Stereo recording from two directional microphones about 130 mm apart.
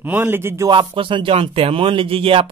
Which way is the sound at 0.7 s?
40° right (ahead or behind).